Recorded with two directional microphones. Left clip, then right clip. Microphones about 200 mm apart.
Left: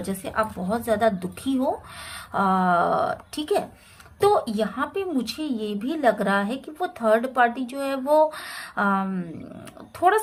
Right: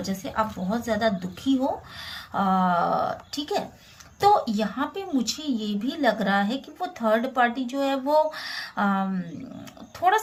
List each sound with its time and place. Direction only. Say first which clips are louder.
0.0 s a woman's voice: left 1 dB; 30° left (ahead or behind)